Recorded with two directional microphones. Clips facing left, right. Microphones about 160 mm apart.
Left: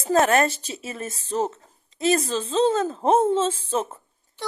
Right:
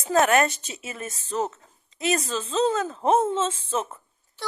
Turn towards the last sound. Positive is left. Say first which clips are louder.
# left 3 dB
turn(degrees=30)  # may be behind; listen again after turning